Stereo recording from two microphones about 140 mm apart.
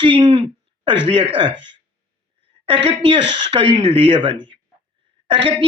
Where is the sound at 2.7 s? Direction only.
40° right (ahead or behind).